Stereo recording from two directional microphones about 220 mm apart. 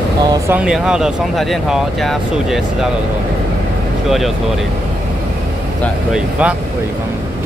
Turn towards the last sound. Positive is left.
turn(degrees=-5)  # may be behind; listen again after turning